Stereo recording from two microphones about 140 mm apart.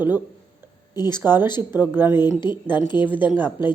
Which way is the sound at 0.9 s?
30° left (ahead or behind).